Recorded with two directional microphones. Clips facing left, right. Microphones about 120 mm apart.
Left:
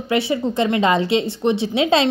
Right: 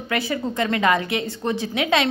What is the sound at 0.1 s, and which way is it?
A woman's voice, 25° left (ahead or behind).